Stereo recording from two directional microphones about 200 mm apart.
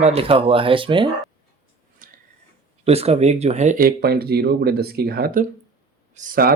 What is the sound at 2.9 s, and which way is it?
Speech, 30° right (ahead or behind).